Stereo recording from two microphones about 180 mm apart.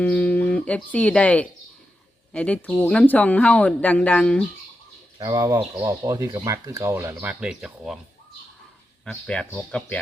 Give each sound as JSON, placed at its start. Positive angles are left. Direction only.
{"t": 0.0, "sound": "speech", "side_deg": 10}
{"t": 5.2, "sound": "speech", "side_deg": -20}
{"t": 9.0, "sound": "speech", "side_deg": 5}